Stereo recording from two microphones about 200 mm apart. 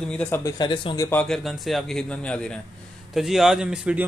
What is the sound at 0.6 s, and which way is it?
Speech, 25° left (ahead or behind).